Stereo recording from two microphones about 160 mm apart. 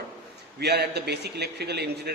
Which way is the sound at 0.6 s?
90° right.